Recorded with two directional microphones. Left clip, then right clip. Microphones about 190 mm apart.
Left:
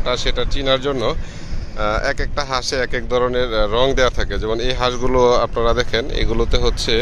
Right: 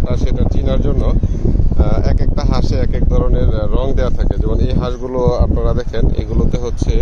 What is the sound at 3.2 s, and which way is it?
Speech, 5° left (ahead or behind).